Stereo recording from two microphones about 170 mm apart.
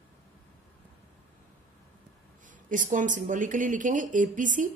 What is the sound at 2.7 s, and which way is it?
Speech, 50° right (ahead or behind).